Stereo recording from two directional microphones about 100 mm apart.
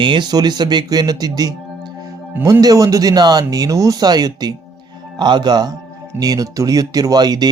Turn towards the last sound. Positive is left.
turn(degrees=-40)  # may be behind; listen again after turning